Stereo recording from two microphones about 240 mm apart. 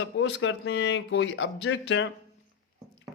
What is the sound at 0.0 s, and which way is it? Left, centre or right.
Speech, left.